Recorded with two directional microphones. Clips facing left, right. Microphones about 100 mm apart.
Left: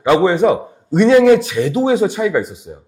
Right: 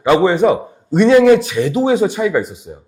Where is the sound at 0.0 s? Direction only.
20° right (ahead or behind).